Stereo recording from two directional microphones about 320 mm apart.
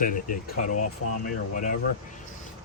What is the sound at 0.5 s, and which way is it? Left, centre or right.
Speech, left.